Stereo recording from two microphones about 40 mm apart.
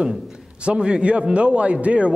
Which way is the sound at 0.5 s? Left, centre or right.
Right.